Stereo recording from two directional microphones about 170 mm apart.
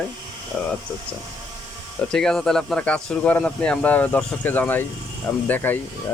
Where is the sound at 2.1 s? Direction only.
5° left (ahead or behind).